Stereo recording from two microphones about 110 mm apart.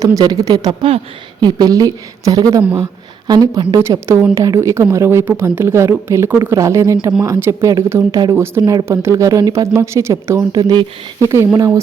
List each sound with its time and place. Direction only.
0.0 s a woman's voice: 35° right (ahead or behind)